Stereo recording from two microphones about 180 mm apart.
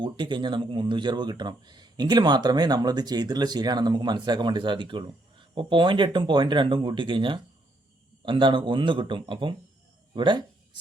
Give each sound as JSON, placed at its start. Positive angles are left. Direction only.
{"t": 0.0, "sound": "speech", "side_deg": -25}